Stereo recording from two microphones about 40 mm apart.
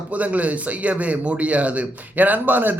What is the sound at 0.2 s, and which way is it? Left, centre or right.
Speech, right.